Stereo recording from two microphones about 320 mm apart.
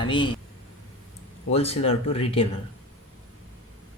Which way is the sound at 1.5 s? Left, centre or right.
Centre.